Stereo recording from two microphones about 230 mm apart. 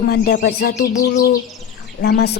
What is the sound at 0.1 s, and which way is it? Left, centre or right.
A woman's voice, left.